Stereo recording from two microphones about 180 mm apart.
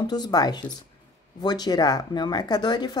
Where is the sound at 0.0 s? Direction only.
20° left (ahead or behind).